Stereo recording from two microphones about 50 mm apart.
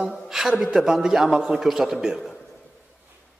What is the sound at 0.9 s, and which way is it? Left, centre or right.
A man's voice, centre.